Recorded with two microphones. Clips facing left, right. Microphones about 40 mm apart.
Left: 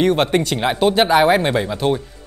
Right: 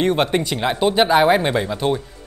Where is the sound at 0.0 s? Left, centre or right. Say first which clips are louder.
Left 2 dB; centre.